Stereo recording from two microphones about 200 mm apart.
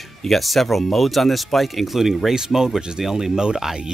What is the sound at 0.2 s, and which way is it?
Speech, centre (ahead or behind).